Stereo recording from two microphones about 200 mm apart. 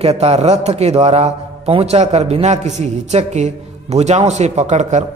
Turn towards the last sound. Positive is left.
turn(degrees=-35)  # may be behind; listen again after turning